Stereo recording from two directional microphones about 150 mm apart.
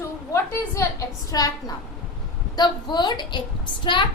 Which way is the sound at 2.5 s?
30° left (ahead or behind).